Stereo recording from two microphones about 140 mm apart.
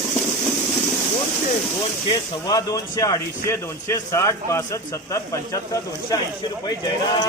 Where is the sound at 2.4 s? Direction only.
25° left (ahead or behind).